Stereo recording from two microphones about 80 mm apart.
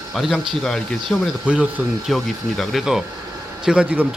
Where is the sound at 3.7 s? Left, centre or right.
Centre.